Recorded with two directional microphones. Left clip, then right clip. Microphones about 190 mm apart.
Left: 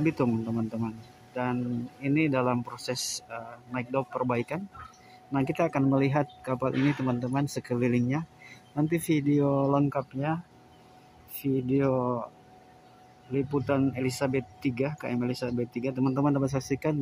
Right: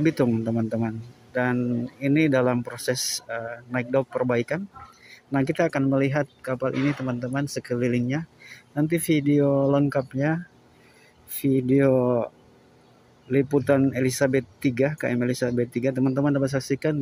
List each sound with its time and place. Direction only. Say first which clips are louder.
0.7 s speech: right 6 dB; 15° right (ahead or behind)
11.4 s speech: right 6 dB; 15° right (ahead or behind)
13.3 s speech: right 7 dB; 15° right (ahead or behind)